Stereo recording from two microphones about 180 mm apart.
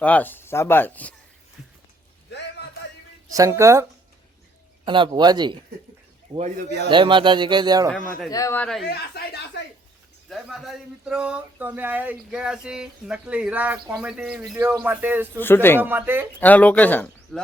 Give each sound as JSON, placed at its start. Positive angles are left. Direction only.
{"t": 0.0, "sound": "speech", "side_deg": 10}
{"t": 3.3, "sound": "speech", "side_deg": -15}
{"t": 4.9, "sound": "speech", "side_deg": -25}
{"t": 7.9, "sound": "speech", "side_deg": 5}
{"t": 8.3, "sound": "speech", "side_deg": 15}
{"t": 8.6, "sound": "speech", "side_deg": 0}
{"t": 9.0, "sound": "speech", "side_deg": 65}
{"t": 10.2, "sound": "speech", "side_deg": 0}
{"t": 15.4, "sound": "speech", "side_deg": 10}
{"t": 15.8, "sound": "speech", "side_deg": -10}
{"t": 16.4, "sound": "speech", "side_deg": 10}